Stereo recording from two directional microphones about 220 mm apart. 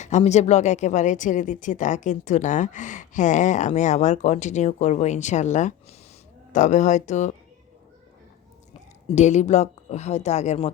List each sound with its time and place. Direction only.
0.0 s speech: 30° left (ahead or behind)
9.0 s speech: 30° left (ahead or behind)